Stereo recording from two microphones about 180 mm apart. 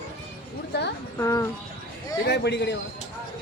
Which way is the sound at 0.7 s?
70° left (ahead or behind).